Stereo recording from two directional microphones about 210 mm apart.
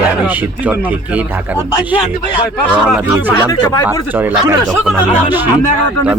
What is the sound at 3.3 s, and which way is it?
Speech, 15° left (ahead or behind).